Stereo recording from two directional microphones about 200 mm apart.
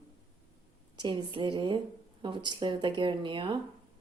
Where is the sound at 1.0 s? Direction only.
20° right (ahead or behind).